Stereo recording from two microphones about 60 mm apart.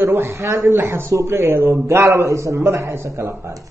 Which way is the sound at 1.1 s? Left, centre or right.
Right.